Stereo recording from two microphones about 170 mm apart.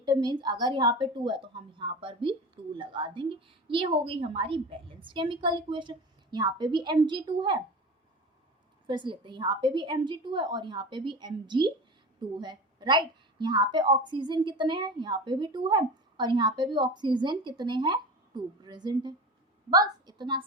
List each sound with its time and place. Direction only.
0.0 s a woman's voice: 25° right (ahead or behind)
8.9 s a woman's voice: 30° right (ahead or behind)